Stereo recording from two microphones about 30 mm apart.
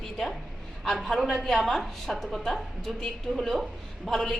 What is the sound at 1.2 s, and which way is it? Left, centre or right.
A woman's voice, centre.